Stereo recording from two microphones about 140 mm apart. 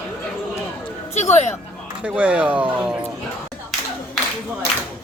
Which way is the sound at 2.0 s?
10° right (ahead or behind).